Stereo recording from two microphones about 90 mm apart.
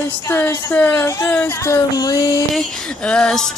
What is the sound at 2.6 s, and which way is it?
Speech, 5° left (ahead or behind).